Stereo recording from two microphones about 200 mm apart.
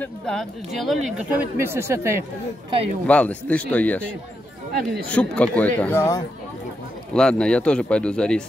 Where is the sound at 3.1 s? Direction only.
5° left (ahead or behind).